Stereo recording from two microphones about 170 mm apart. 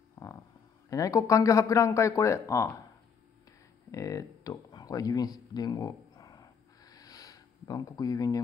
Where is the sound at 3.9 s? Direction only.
20° left (ahead or behind).